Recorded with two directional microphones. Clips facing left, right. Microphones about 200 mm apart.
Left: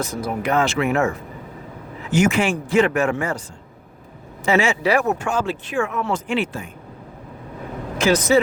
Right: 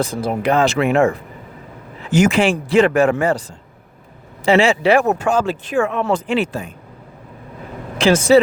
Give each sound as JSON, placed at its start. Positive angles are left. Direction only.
{"t": 0.0, "sound": "speech", "side_deg": -30}
{"t": 2.2, "sound": "speech", "side_deg": -35}
{"t": 4.4, "sound": "speech", "side_deg": -30}
{"t": 7.9, "sound": "speech", "side_deg": -30}